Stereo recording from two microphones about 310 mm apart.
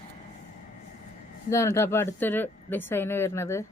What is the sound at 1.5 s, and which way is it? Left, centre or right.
Speech, centre.